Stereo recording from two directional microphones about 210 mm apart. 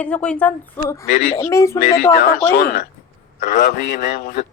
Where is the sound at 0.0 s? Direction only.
5° left (ahead or behind).